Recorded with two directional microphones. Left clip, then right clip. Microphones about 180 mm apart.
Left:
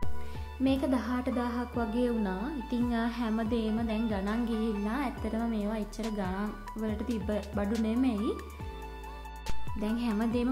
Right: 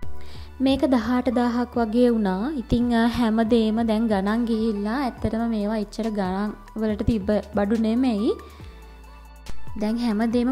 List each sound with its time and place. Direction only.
0.7 s a woman's voice: 40° right (ahead or behind)
9.8 s speech: 40° right (ahead or behind)